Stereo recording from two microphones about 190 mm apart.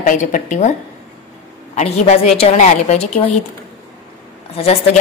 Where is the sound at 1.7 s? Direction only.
35° left (ahead or behind).